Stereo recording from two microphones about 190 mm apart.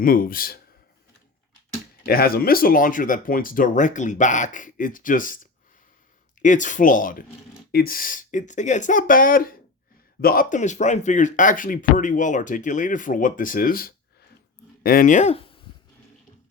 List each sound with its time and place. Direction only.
0.0 s speech: 50° left (ahead or behind)
2.0 s speech: 55° left (ahead or behind)
6.4 s speech: 40° left (ahead or behind)